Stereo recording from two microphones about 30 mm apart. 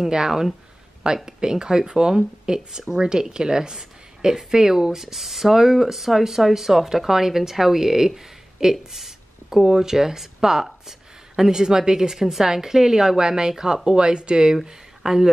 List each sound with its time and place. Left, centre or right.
0.0 s a woman's voice: centre
8.9 s speech: centre
13.8 s a woman's voice: right
14.6 s speech: centre